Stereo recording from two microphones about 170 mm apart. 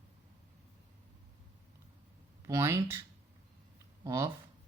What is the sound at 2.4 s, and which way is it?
Speech, 15° right (ahead or behind).